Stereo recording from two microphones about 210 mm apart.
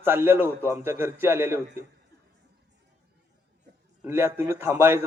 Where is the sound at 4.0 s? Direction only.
10° right (ahead or behind).